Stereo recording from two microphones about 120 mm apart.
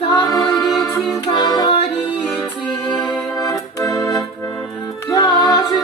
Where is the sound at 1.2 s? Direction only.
35° left (ahead or behind).